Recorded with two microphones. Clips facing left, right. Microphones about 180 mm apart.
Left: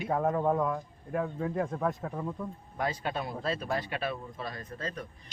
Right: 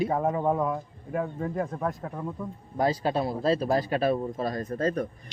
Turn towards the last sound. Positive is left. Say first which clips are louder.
# right 11 dB
turn(degrees=-45)  # may be behind; listen again after turning